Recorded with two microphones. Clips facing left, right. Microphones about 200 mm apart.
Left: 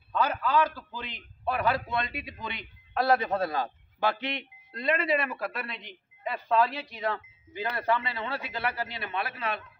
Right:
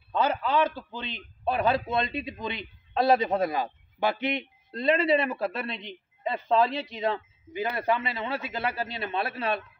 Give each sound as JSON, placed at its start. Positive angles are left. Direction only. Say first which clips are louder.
{"t": 0.1, "sound": "a man's voice", "louder": "right 1 dB", "side_deg": -25}